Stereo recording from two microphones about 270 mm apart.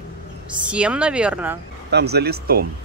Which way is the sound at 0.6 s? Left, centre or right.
Centre.